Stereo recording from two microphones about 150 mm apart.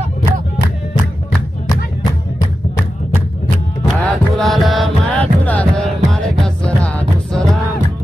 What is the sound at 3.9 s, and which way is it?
Music, centre (ahead or behind).